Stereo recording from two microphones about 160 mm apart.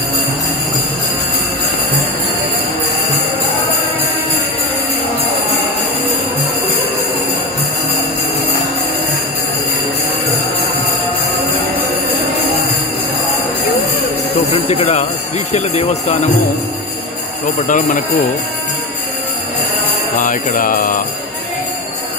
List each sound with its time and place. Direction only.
14.5 s a sound: 40° left (ahead or behind)
17.6 s speech: 55° left (ahead or behind)
20.2 s mantra: 60° left (ahead or behind)